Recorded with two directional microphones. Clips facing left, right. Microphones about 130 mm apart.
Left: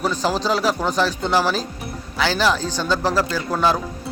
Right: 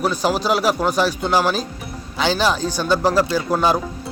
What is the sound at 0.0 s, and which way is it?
Speech, 15° right (ahead or behind).